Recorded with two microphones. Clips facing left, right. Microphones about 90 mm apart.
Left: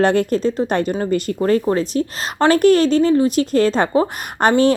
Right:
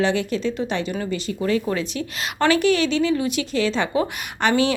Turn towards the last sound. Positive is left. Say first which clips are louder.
# left 5 dB
turn(degrees=40)  # may be behind; listen again after turning